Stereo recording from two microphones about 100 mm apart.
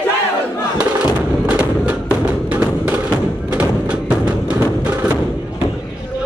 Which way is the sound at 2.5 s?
20° right (ahead or behind).